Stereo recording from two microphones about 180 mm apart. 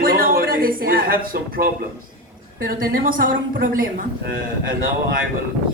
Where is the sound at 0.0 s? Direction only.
55° right (ahead or behind).